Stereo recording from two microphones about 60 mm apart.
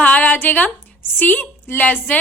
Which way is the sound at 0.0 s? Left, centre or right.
Left.